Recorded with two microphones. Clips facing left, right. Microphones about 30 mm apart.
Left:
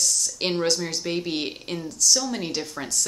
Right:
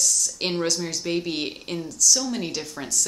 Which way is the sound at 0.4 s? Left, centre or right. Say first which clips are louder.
Left 3 dB; centre.